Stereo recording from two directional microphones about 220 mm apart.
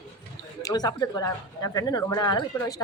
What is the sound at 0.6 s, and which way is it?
Speech, 15° left (ahead or behind).